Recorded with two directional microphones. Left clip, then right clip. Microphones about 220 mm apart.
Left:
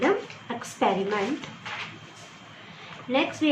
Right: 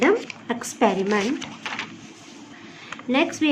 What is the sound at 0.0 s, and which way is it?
A woman's voice, 60° right (ahead or behind).